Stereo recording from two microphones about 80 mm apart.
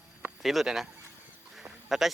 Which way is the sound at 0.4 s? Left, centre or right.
Centre.